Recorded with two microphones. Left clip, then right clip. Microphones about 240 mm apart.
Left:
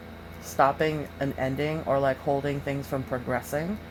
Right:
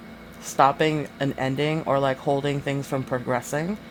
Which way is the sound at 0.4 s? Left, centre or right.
Right.